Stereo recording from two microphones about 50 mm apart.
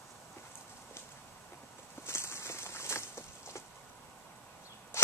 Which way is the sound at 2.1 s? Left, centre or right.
Left.